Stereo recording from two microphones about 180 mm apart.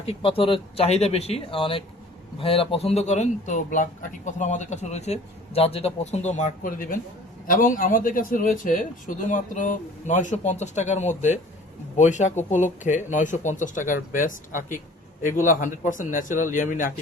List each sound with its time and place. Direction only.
0.0 s a man's voice: 30° left (ahead or behind); by 16.9 s 45° left (ahead or behind)